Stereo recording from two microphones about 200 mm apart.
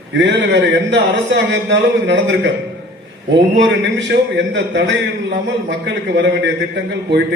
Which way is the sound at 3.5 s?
65° right (ahead or behind).